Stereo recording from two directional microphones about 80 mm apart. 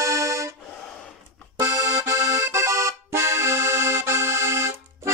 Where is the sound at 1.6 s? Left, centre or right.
Right.